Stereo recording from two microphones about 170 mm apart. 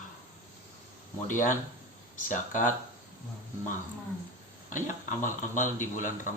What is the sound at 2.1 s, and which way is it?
Speech, 50° left (ahead or behind).